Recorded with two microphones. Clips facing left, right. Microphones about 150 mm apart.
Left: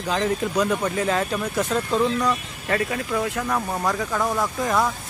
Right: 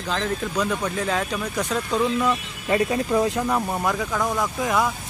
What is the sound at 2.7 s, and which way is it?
Speech, 25° right (ahead or behind).